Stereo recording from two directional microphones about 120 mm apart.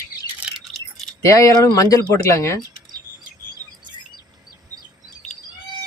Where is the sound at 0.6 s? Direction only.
Centre (ahead or behind).